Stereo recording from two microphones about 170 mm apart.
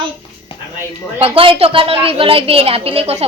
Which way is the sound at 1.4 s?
35° right (ahead or behind).